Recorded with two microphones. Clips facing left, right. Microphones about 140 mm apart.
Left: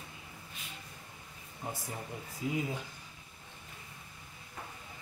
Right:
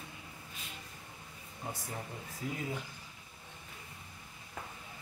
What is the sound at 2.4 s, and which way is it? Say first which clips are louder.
Speech: left 5 dB; 20° left (ahead or behind).